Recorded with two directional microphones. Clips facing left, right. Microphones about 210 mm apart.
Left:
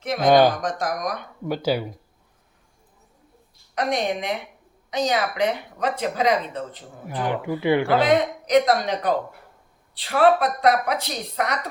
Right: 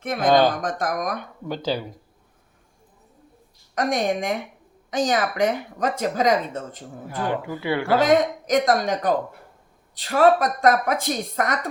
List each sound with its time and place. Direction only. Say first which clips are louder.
0.0 s speech: left 1 dB; 55° right (ahead or behind)
0.3 s speech: left 2 dB; 10° left (ahead or behind)
0.6 s speech: even; 55° right (ahead or behind)
1.5 s speech: left 3 dB; 10° left (ahead or behind)
3.8 s speech: right 1 dB; 45° right (ahead or behind)
7.2 s speech: left 1 dB; 15° left (ahead or behind)
7.9 s speech: right 1 dB; 45° right (ahead or behind)